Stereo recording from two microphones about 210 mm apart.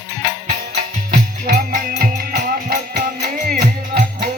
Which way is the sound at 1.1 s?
45° right (ahead or behind).